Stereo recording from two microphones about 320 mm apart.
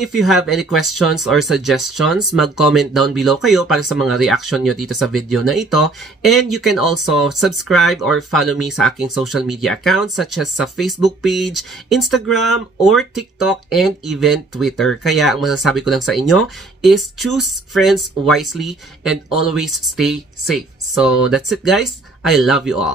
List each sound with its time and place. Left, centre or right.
0.0 s speech: centre
6.7 s speech: left
7.3 s speech: centre